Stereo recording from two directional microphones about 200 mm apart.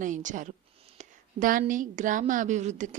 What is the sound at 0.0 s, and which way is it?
A woman's voice, 40° right (ahead or behind).